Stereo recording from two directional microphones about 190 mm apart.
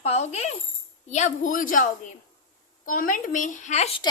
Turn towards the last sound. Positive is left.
turn(degrees=40)  # may be behind; listen again after turning